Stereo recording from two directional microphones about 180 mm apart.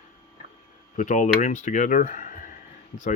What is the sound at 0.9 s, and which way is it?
Speech, 45° left (ahead or behind).